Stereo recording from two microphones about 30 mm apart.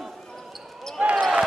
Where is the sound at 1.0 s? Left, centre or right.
Right.